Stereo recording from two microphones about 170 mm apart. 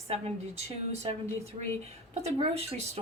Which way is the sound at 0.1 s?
35° right (ahead or behind).